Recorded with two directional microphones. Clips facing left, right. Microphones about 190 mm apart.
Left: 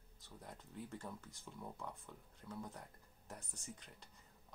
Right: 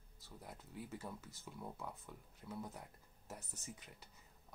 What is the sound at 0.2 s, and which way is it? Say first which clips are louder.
Speech: even; 5° right (ahead or behind).